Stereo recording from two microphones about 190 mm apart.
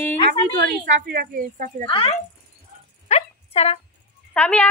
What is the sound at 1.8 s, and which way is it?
Speech, 30° left (ahead or behind).